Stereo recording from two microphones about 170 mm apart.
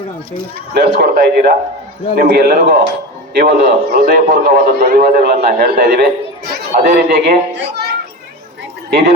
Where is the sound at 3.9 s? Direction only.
60° right (ahead or behind); by 6.1 s 75° right (ahead or behind).